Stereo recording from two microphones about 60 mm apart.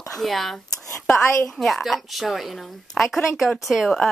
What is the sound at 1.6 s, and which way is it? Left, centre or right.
A woman's voice, centre.